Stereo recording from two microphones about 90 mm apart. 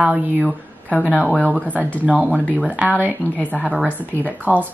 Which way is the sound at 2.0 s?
15° right (ahead or behind).